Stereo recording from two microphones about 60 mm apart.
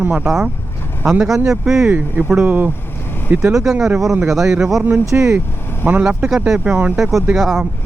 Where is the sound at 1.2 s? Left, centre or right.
Centre.